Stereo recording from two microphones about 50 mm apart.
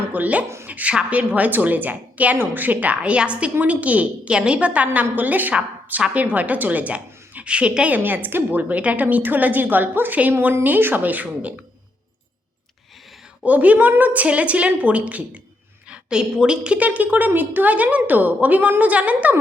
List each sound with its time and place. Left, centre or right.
0.1 s a woman's voice: right
0.4 s speech: right
0.7 s a woman's voice: right
7.9 s a woman's voice: right
8.7 s a woman's voice: right
13.4 s a woman's voice: right